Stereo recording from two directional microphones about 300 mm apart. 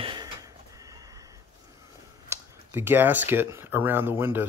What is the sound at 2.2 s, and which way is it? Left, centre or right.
Speech, centre.